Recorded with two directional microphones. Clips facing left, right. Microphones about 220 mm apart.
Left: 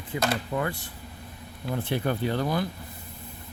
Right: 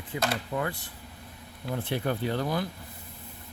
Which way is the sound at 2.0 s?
70° left (ahead or behind).